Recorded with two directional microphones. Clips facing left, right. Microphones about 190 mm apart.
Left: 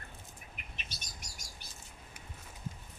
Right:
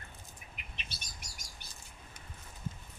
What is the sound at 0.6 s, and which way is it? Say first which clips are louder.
Bird: left 1 dB; 50° left (ahead or behind).